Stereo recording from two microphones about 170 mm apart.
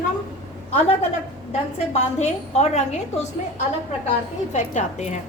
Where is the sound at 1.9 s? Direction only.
40° left (ahead or behind).